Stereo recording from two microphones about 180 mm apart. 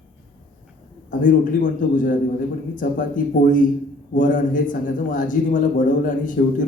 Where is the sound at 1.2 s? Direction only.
45° left (ahead or behind).